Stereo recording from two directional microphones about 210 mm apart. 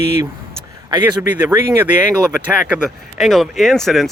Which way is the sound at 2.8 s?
Centre (ahead or behind).